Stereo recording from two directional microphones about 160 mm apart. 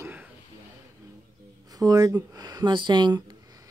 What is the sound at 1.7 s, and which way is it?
Speech, 20° right (ahead or behind).